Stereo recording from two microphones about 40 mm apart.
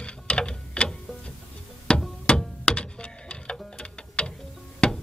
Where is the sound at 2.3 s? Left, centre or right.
Left.